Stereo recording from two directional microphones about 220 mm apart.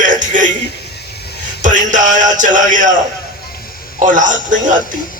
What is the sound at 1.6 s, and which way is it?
A man's voice, 35° right (ahead or behind).